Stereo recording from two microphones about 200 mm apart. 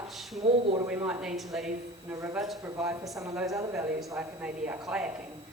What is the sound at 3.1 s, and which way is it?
A woman's voice, 15° right (ahead or behind).